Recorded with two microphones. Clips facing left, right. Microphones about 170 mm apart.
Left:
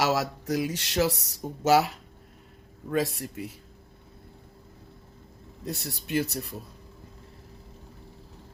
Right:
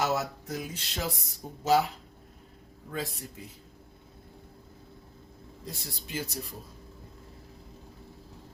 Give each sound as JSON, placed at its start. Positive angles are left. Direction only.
{"t": 0.0, "sound": "speech", "side_deg": 90}
{"t": 5.6, "sound": "speech", "side_deg": 65}